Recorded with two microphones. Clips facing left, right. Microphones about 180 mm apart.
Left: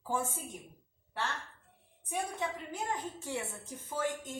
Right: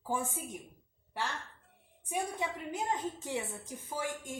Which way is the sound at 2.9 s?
20° right (ahead or behind).